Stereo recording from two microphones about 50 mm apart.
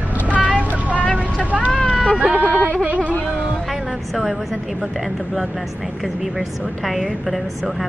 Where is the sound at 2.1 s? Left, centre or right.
Right.